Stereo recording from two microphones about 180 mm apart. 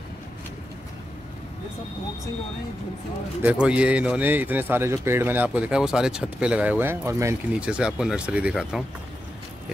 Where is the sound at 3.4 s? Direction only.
10° right (ahead or behind).